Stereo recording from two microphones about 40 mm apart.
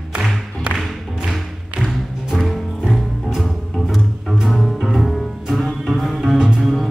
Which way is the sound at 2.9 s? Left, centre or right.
Centre.